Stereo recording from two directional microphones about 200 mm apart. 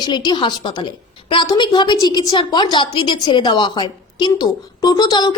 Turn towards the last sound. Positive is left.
turn(degrees=20)  # may be behind; listen again after turning